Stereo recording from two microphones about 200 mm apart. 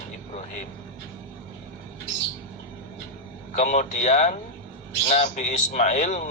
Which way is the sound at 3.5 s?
35° left (ahead or behind).